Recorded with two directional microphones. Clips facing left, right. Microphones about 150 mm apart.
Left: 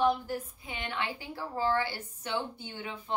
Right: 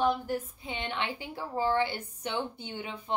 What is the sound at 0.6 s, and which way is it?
A woman's voice, 25° right (ahead or behind).